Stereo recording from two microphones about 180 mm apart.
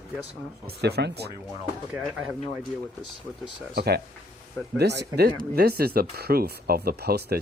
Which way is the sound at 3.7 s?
65° right (ahead or behind).